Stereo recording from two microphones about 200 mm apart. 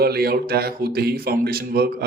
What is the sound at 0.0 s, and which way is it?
Speech, 50° right (ahead or behind).